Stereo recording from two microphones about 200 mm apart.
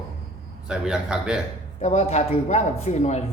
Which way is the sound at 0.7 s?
5° right (ahead or behind).